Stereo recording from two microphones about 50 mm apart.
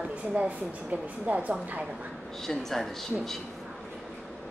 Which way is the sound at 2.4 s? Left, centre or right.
Centre.